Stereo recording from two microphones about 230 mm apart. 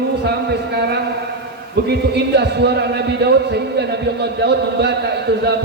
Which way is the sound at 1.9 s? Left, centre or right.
Right.